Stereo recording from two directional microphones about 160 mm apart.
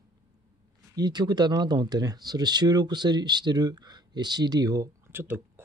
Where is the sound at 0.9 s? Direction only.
25° right (ahead or behind).